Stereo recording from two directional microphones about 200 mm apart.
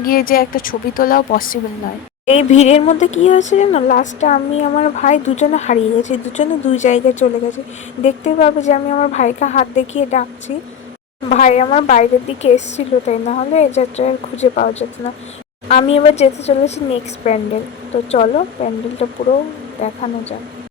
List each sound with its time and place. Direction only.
0.0 s a woman's voice: 45° left (ahead or behind)
2.2 s speech: 35° left (ahead or behind)
11.3 s speech: 35° left (ahead or behind)